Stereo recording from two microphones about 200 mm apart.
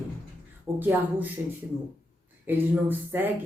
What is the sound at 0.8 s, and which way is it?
Speech, 10° right (ahead or behind).